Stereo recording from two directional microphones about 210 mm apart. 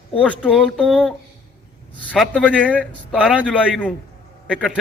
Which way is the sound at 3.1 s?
5° right (ahead or behind).